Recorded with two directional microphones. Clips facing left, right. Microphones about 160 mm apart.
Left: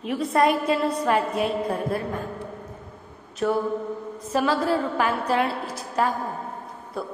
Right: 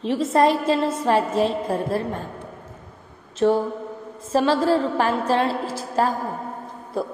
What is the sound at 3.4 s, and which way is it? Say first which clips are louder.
A woman's voice: right 4 dB; 35° right (ahead or behind).